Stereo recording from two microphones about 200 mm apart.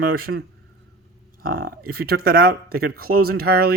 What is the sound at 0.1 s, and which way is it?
Speech, 50° right (ahead or behind).